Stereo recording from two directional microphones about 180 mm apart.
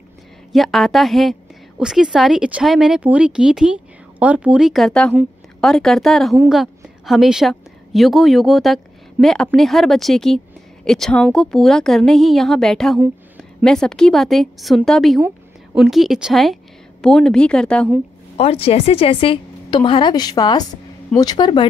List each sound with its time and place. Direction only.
0.5 s a woman's voice: centre (ahead or behind)
18.4 s a woman's voice: 35° left (ahead or behind)